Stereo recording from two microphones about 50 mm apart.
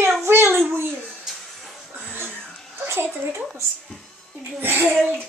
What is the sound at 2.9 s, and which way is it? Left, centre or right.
Speech, right.